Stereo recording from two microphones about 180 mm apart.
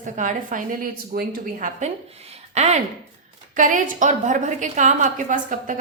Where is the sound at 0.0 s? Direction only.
45° right (ahead or behind).